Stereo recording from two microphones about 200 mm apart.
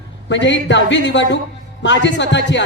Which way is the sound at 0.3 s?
65° left (ahead or behind).